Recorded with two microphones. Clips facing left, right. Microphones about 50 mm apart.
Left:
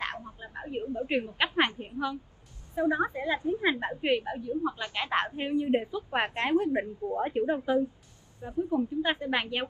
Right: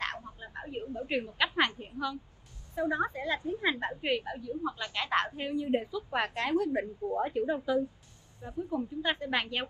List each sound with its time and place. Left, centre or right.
0.0 s a sound: centre
0.9 s a woman's voice: left
8.4 s a woman's voice: centre